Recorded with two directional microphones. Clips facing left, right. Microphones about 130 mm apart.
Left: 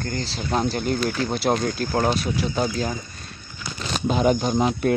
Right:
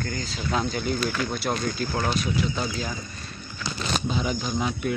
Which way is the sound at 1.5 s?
40° left (ahead or behind).